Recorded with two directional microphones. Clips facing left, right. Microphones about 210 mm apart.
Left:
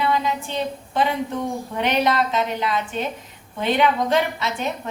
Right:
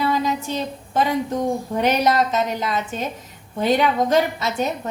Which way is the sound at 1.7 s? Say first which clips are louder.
Right 1 dB; 40° right (ahead or behind).